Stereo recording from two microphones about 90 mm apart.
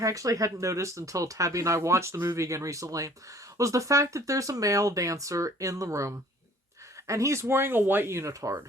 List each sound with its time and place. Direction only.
0.0 s speech: 40° right (ahead or behind)